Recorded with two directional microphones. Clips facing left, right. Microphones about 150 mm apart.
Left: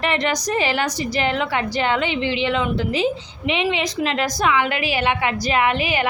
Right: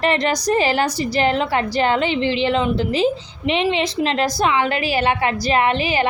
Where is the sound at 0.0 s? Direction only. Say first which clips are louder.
Right 3 dB; 35° right (ahead or behind).